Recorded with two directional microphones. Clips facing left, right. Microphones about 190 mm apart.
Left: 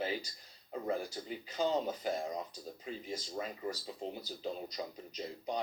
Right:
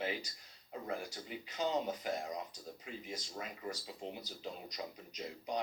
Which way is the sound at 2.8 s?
35° left (ahead or behind).